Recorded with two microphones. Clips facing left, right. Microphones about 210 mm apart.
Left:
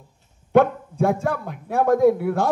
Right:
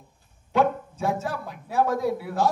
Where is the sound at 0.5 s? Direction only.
55° left (ahead or behind).